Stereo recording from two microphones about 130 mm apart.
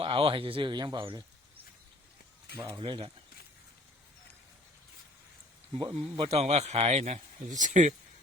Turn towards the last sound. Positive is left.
turn(degrees=-70)  # may be behind; listen again after turning